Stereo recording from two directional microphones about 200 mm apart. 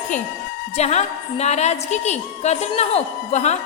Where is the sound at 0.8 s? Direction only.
35° left (ahead or behind).